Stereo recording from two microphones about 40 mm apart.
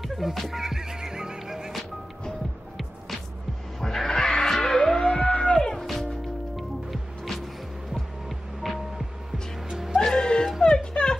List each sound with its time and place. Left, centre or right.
0.0 s music: centre
3.8 s music: centre
9.7 s music: centre
9.9 s music: centre